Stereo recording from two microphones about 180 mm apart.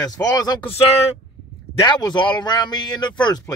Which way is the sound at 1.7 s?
25° left (ahead or behind).